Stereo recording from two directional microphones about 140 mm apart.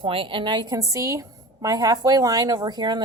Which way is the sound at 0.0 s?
40° right (ahead or behind).